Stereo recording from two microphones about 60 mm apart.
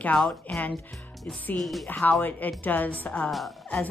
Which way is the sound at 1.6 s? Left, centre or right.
Centre.